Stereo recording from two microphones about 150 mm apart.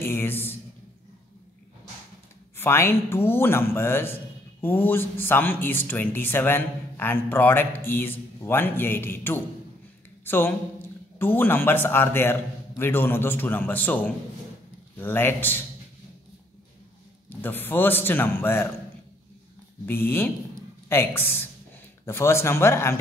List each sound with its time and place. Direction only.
0.0 s a sound: 15° left (ahead or behind)
2.5 s a man's voice: 15° left (ahead or behind)
17.3 s a man's voice: 15° left (ahead or behind)
19.9 s a man's voice: 15° left (ahead or behind)